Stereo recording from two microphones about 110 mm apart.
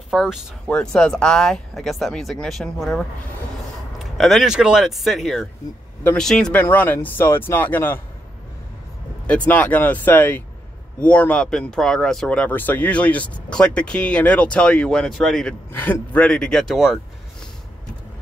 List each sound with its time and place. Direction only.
0.1 s speech: 5° right (ahead or behind)
0.7 s speech: 10° left (ahead or behind)
9.3 s speech: 10° left (ahead or behind)
15.7 s speech: 15° left (ahead or behind); by 17.5 s centre (ahead or behind)